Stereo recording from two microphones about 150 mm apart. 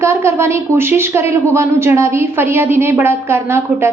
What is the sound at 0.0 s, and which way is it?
A woman's voice, 20° right (ahead or behind).